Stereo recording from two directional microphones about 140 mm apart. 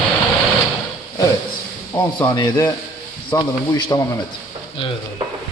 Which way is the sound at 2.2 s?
25° left (ahead or behind).